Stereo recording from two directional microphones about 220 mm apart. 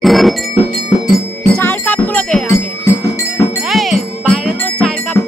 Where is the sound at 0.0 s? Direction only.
Centre (ahead or behind).